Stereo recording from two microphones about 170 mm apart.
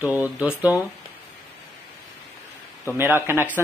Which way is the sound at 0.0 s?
10° right (ahead or behind).